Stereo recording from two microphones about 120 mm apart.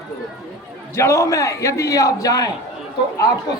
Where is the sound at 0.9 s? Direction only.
25° left (ahead or behind).